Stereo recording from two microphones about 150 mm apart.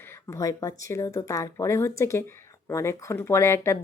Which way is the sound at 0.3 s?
20° left (ahead or behind).